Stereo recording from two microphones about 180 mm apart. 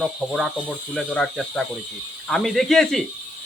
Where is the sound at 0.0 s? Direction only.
Centre (ahead or behind).